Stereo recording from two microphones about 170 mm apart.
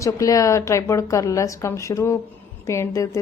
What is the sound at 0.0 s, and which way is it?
A woman's voice, 20° left (ahead or behind).